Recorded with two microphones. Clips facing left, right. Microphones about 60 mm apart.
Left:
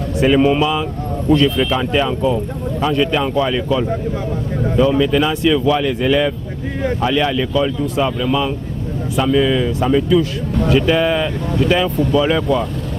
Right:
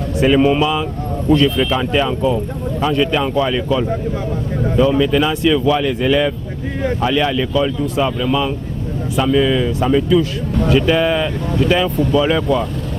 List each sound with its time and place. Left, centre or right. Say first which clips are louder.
0.2 s speech: even; right